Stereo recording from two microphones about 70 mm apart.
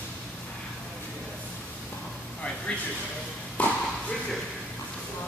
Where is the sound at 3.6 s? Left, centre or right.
Centre.